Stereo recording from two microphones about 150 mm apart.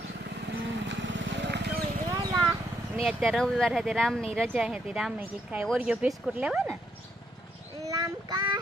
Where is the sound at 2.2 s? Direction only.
30° right (ahead or behind).